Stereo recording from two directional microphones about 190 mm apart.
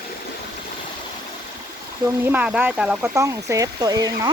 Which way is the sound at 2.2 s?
10° right (ahead or behind).